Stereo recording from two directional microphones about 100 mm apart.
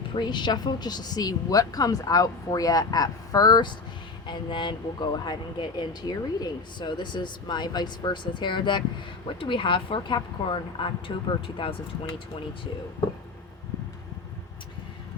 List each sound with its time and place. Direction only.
0.1 s speech: 50° left (ahead or behind)